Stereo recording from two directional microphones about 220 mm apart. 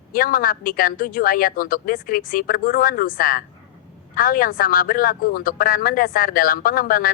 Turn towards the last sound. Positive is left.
turn(degrees=40)  # may be behind; listen again after turning